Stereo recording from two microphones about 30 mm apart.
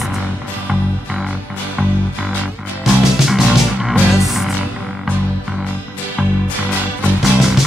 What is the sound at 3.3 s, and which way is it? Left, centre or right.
Music, centre.